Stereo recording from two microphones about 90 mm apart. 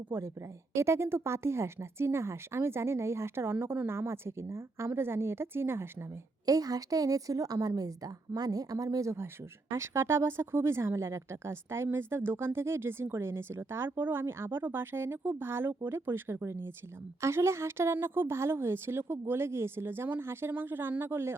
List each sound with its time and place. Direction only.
0.1 s speech: 25° right (ahead or behind)
6.4 s a woman's voice: 40° right (ahead or behind); by 21.3 s 25° right (ahead or behind)